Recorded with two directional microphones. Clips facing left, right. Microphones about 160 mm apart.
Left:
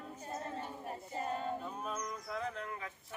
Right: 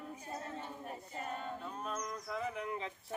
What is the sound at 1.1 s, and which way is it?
A capella, 35° left (ahead or behind).